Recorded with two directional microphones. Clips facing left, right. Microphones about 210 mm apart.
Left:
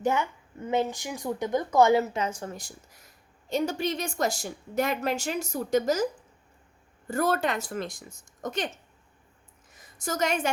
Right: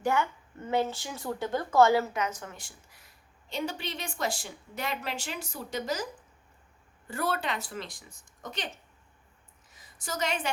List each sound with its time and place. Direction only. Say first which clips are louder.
0.0 s a woman's voice: left 1 dB; 20° left (ahead or behind); by 6.1 s 45° left (ahead or behind)
7.1 s a woman's voice: left 6 dB; 45° left (ahead or behind)
9.7 s a woman's voice: left 5 dB; 45° left (ahead or behind)